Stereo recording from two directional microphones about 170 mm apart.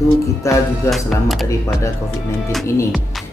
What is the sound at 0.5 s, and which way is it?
Speech, 15° left (ahead or behind).